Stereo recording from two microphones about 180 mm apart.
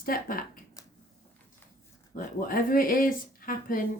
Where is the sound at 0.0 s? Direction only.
55° left (ahead or behind).